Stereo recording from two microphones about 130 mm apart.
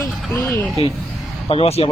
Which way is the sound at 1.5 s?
50° left (ahead or behind).